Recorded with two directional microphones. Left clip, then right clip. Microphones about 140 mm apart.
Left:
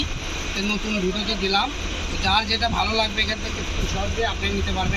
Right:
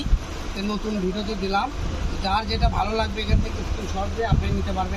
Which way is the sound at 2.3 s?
30° right (ahead or behind).